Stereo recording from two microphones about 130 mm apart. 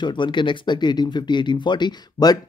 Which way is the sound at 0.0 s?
35° left (ahead or behind).